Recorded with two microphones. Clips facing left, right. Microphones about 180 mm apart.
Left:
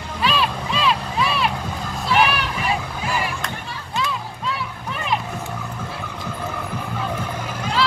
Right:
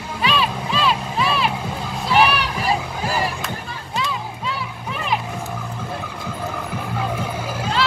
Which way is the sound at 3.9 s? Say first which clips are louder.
Even; centre (ahead or behind).